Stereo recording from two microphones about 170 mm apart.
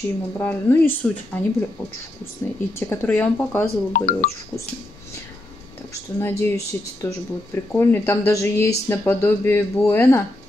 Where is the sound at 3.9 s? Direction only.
50° left (ahead or behind).